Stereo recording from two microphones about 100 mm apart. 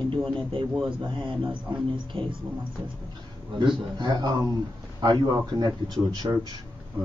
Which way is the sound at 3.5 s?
50° right (ahead or behind).